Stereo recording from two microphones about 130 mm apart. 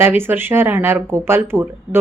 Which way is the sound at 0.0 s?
15° right (ahead or behind).